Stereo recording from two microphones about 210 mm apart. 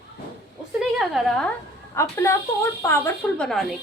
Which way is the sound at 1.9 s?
15° left (ahead or behind).